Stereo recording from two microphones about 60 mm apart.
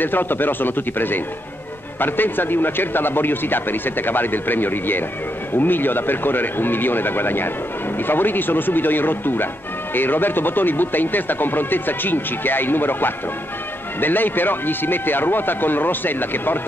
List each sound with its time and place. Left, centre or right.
0.0 s speech: left